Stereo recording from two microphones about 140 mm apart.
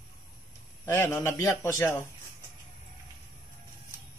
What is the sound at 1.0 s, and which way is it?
Speech, 20° left (ahead or behind).